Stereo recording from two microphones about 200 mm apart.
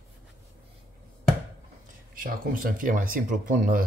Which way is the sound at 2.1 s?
45° right (ahead or behind).